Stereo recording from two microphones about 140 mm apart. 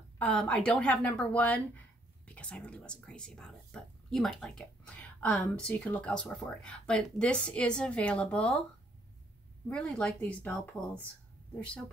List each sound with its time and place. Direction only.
0.2 s speech: 5° left (ahead or behind)
9.7 s speech: 5° left (ahead or behind)